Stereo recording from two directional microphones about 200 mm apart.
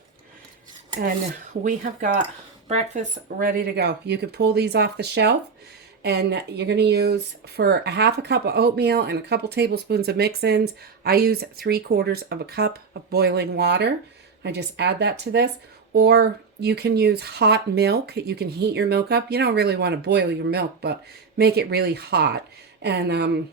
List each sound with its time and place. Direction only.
1.6 s speech: 40° right (ahead or behind)
3.2 s speech: 50° right (ahead or behind)